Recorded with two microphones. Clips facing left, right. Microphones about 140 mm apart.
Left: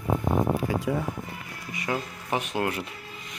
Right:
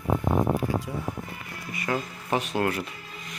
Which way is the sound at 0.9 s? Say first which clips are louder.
Left 6 dB; 70° left (ahead or behind).